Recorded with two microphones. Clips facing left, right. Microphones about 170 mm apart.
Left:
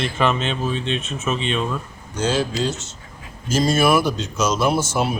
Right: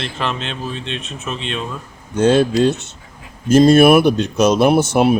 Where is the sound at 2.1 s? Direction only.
60° right (ahead or behind).